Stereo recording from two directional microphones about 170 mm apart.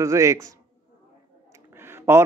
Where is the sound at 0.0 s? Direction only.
15° right (ahead or behind).